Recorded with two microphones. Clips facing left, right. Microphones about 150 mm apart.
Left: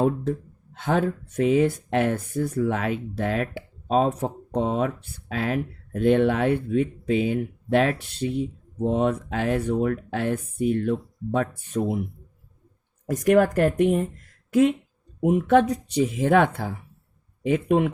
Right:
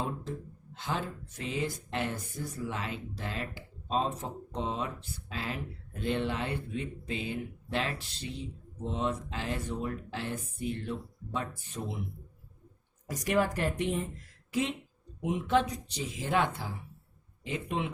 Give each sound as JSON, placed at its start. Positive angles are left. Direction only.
{"t": 0.0, "sound": "speech", "side_deg": 55}
{"t": 13.1, "sound": "speech", "side_deg": 50}